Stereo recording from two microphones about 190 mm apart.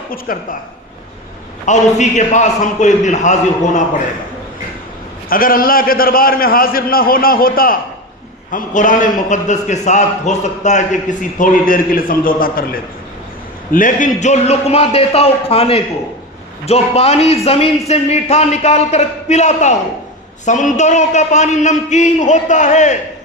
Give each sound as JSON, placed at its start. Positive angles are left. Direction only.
{"t": 0.3, "sound": "a man's voice", "side_deg": 45}
{"t": 1.6, "sound": "a man's voice", "side_deg": 40}
{"t": 5.3, "sound": "a man's voice", "side_deg": 50}
{"t": 13.7, "sound": "a man's voice", "side_deg": 45}